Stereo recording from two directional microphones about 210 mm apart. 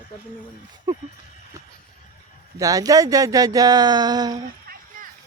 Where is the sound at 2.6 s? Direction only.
15° right (ahead or behind).